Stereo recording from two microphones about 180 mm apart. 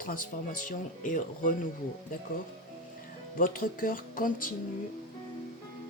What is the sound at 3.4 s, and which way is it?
Speech, 50° left (ahead or behind).